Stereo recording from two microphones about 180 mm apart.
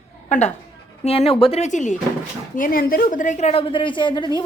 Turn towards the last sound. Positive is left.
turn(degrees=25)  # may be behind; listen again after turning